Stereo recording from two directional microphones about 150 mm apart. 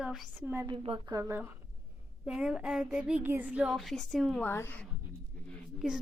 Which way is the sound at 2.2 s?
5° right (ahead or behind).